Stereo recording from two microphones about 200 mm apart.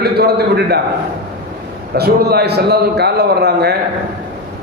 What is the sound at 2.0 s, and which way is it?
A man's voice, 55° right (ahead or behind).